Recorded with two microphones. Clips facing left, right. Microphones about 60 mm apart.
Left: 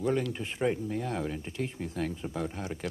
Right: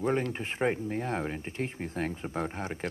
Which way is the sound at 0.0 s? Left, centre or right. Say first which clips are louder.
Even; right.